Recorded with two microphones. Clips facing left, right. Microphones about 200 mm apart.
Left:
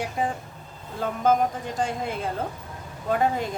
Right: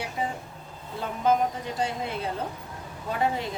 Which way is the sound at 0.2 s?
45° left (ahead or behind).